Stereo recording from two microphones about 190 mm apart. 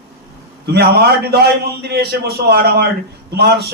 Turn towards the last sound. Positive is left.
turn(degrees=-55)  # may be behind; listen again after turning